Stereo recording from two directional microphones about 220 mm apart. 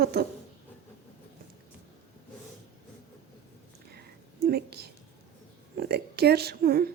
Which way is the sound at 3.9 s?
45° right (ahead or behind).